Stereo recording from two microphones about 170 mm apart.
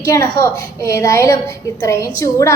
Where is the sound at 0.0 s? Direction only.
20° left (ahead or behind).